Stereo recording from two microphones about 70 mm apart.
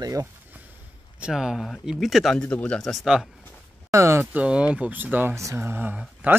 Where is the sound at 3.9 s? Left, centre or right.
Right.